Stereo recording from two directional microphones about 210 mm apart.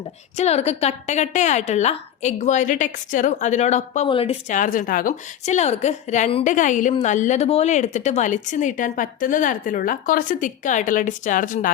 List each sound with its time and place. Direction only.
0.3 s a woman's voice: 30° left (ahead or behind)